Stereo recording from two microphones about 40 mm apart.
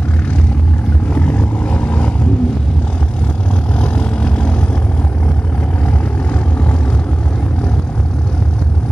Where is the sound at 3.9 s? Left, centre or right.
Left.